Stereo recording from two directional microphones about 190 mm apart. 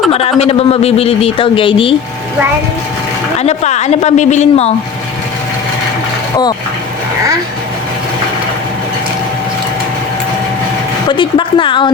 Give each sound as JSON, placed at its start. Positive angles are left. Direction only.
{"t": 0.1, "sound": "a man's voice", "side_deg": 30}
{"t": 3.3, "sound": "a man's voice", "side_deg": 35}
{"t": 11.1, "sound": "speech", "side_deg": 25}